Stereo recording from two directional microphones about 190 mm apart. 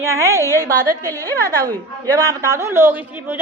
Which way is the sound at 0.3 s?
15° left (ahead or behind).